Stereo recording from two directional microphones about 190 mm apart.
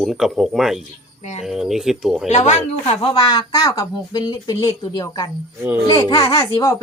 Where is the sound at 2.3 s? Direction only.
35° left (ahead or behind).